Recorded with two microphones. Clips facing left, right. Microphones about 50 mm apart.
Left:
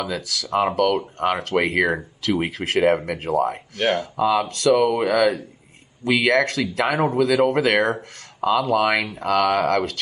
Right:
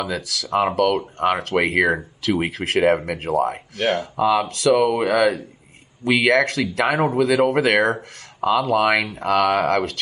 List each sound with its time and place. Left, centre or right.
0.0 s speech: centre